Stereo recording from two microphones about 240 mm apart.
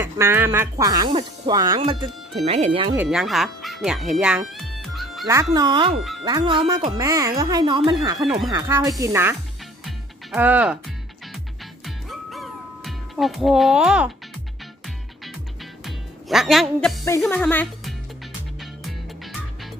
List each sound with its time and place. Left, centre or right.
0.0 s speech: centre
3.0 s speech: centre
5.2 s speech: centre
9.8 s music: centre
15.8 s music: centre
17.2 s speech: centre
18.6 s music: centre